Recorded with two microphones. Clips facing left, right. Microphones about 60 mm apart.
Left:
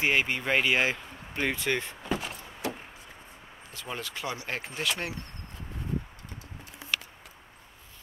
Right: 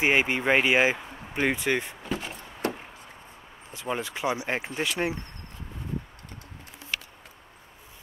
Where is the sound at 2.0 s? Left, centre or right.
Centre.